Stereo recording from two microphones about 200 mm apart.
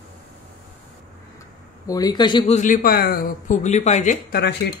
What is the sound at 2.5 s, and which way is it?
Speech, 45° left (ahead or behind).